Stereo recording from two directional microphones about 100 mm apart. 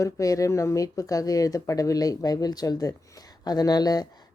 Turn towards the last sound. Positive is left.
turn(degrees=40)  # may be behind; listen again after turning